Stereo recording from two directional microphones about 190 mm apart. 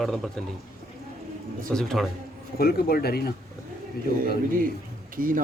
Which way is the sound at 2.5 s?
55° left (ahead or behind).